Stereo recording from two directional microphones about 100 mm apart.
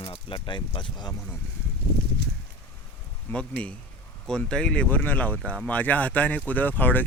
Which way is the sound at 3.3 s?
10° left (ahead or behind).